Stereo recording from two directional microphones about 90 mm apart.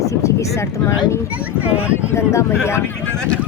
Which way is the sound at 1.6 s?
15° right (ahead or behind).